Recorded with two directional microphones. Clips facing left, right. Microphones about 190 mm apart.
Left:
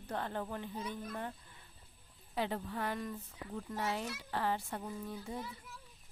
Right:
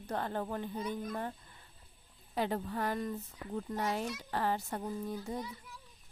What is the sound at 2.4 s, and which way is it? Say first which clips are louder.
A woman's voice: right 3 dB; 40° right (ahead or behind).